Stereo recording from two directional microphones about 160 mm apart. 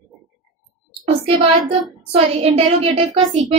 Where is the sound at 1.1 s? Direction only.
35° right (ahead or behind).